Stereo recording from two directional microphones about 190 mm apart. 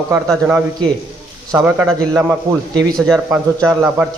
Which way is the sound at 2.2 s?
15° right (ahead or behind).